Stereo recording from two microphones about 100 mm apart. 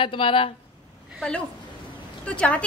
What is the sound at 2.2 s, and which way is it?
Speech, 10° left (ahead or behind).